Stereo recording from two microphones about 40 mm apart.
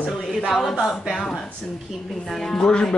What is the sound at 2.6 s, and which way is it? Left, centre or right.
Speech, left.